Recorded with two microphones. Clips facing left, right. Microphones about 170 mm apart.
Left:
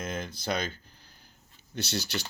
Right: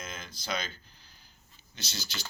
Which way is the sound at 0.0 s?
60° left (ahead or behind).